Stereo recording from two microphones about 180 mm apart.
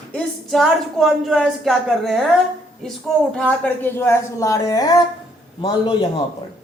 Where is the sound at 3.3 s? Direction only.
5° left (ahead or behind); by 6.1 s 25° left (ahead or behind).